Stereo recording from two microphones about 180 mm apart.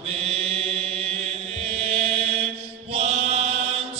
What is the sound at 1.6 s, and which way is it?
Chant, 35° right (ahead or behind).